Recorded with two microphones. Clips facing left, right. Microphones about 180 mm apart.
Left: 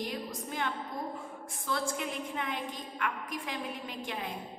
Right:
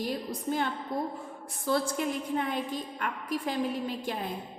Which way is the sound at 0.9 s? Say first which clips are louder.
Right 6 dB; 70° right (ahead or behind).